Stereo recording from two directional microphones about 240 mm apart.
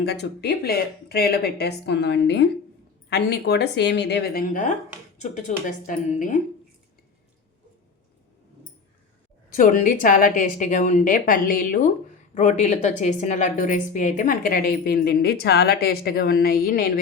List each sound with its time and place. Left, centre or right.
0.0 s a woman's voice: left
9.6 s a woman's voice: left